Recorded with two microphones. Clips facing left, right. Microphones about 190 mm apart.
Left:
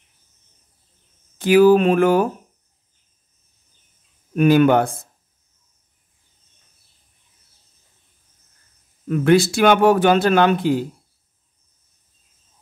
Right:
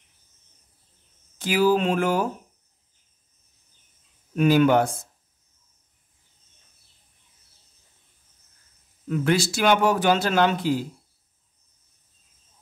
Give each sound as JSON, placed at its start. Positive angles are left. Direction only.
{"t": 1.4, "sound": "a man's voice", "side_deg": 55}
{"t": 4.4, "sound": "a man's voice", "side_deg": 60}
{"t": 9.1, "sound": "a man's voice", "side_deg": 55}